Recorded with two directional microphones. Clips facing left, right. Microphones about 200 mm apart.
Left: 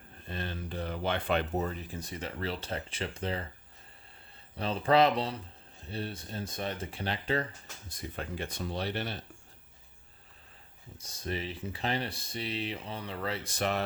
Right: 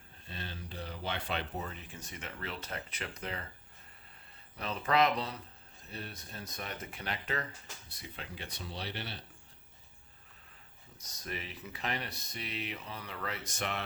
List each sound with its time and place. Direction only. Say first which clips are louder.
0.3 s speech: left 7 dB; 55° left (ahead or behind); by 3.4 s 30° left (ahead or behind)
4.5 s speech: left 5 dB; 30° left (ahead or behind)
7.9 s speech: left 9 dB; 45° left (ahead or behind)
10.9 s speech: left 6 dB; 30° left (ahead or behind)